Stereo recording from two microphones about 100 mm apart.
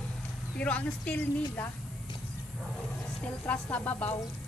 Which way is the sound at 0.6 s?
15° left (ahead or behind).